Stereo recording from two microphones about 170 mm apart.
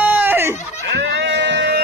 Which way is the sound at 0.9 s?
90° right.